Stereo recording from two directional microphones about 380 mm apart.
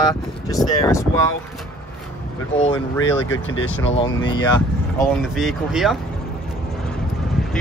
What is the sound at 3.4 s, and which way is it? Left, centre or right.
Speech, left.